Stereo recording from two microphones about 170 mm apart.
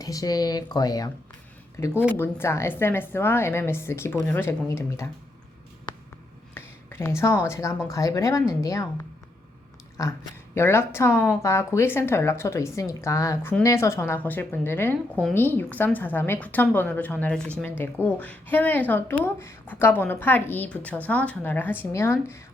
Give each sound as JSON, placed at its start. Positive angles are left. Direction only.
{"t": 0.0, "sound": "speech", "side_deg": 20}
{"t": 6.5, "sound": "speech", "side_deg": 15}